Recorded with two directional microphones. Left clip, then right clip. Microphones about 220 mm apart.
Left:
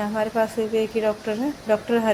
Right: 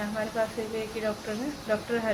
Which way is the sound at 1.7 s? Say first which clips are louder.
Left 7 dB; 30° left (ahead or behind).